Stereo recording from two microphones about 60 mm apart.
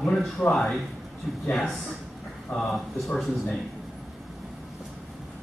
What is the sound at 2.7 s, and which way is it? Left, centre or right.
Speech, centre.